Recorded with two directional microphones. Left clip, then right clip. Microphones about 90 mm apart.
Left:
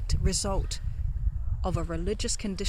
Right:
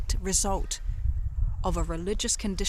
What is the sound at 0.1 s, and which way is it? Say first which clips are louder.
Speech: right 2 dB; 40° right (ahead or behind).